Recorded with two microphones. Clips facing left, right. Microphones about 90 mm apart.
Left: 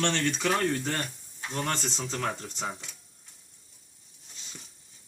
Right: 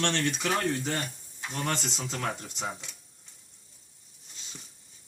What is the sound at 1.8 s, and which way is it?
Speech, 5° right (ahead or behind).